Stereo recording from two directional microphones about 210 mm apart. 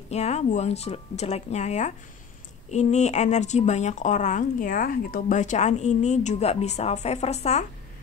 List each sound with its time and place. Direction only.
0.1 s speech: 30° left (ahead or behind)